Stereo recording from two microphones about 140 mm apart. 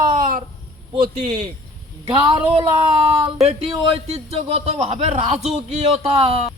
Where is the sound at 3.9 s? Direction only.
45° right (ahead or behind).